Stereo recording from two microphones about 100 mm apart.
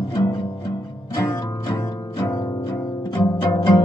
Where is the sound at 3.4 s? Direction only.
45° left (ahead or behind).